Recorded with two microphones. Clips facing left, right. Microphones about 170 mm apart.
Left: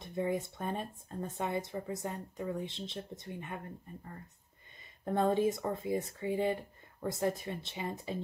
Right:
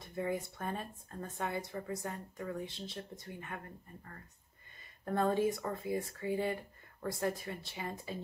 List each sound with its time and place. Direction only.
0.0 s speech: 20° left (ahead or behind)
5.0 s speech: 20° left (ahead or behind)